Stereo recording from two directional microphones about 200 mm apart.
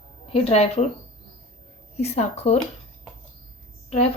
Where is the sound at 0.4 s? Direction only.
30° left (ahead or behind).